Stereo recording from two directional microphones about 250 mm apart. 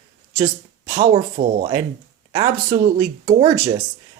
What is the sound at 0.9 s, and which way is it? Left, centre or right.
Speech, right.